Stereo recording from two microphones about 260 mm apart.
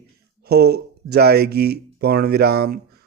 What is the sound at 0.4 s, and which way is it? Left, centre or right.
A man's voice, right.